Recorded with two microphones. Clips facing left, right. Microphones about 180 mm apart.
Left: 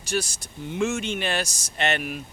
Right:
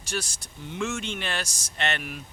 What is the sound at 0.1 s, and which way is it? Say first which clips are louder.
Speech: left 5 dB; 10° left (ahead or behind).